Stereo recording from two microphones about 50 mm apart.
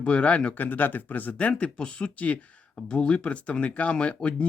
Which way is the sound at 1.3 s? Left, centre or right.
Left.